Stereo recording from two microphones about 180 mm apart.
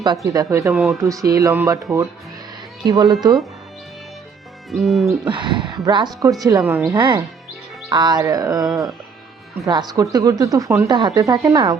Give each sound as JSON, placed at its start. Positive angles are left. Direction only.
{"t": 0.0, "sound": "speech", "side_deg": -20}
{"t": 0.7, "sound": "music", "side_deg": -5}
{"t": 0.9, "sound": "speech", "side_deg": -20}
{"t": 4.7, "sound": "music", "side_deg": 0}
{"t": 5.3, "sound": "speech", "side_deg": -25}